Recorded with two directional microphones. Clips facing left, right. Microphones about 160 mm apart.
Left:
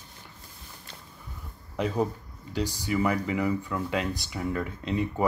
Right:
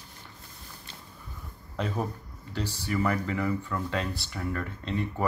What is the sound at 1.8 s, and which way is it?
Speech, 15° left (ahead or behind).